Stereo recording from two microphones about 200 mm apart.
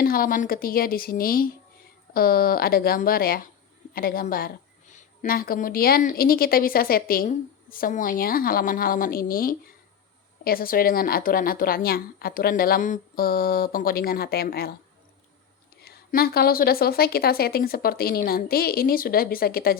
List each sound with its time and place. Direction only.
0.0 s a woman's voice: 45° left (ahead or behind)
15.8 s a woman's voice: 50° left (ahead or behind)